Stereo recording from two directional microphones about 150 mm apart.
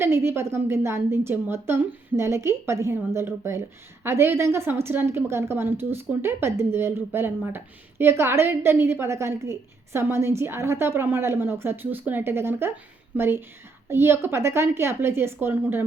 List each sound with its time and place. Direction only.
0.0 s a woman's voice: 15° right (ahead or behind)